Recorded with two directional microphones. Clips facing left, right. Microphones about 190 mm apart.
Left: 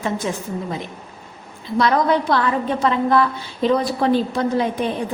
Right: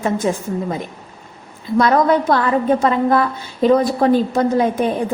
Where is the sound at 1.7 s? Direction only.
45° right (ahead or behind).